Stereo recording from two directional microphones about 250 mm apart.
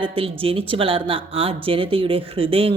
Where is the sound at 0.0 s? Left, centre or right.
Right.